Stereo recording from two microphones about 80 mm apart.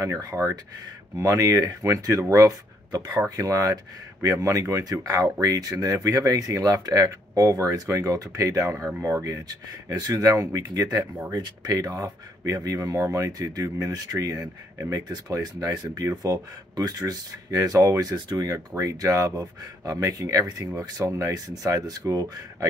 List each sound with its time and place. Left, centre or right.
0.0 s speech: right
15.7 s speech: right